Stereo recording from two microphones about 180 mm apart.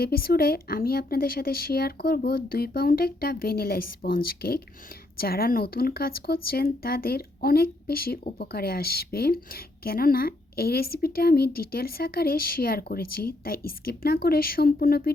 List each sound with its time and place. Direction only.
0.0 s a woman's voice: 55° left (ahead or behind)